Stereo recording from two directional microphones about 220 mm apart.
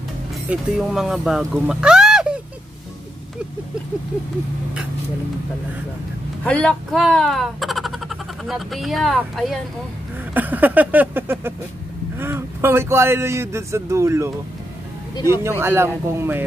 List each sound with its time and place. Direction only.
0.5 s speech: 5° right (ahead or behind)
6.4 s speech: 5° left (ahead or behind)